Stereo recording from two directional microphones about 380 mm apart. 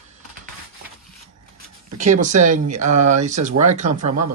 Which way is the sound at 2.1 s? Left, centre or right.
Centre.